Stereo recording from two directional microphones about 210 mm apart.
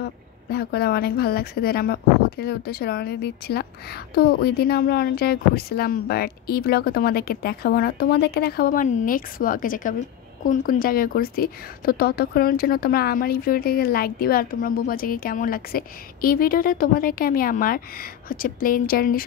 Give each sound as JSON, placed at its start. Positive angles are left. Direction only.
{"t": 0.5, "sound": "speech", "side_deg": 50}